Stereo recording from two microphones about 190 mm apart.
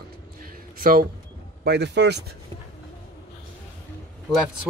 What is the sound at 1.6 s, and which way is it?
Speech, 65° right (ahead or behind).